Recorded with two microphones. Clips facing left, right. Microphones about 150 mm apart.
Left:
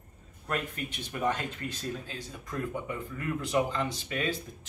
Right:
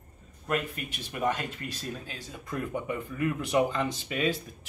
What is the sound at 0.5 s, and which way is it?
Speech, 10° right (ahead or behind).